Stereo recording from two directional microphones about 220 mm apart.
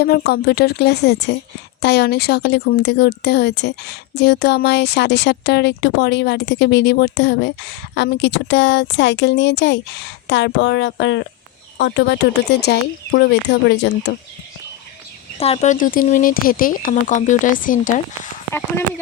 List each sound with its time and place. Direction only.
0.0 s speech: 45° left (ahead or behind)
15.4 s speech: 30° left (ahead or behind)